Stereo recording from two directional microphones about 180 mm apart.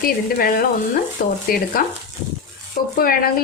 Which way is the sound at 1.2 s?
55° left (ahead or behind).